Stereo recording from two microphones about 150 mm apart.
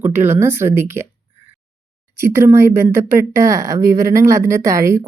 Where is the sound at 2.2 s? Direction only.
15° right (ahead or behind).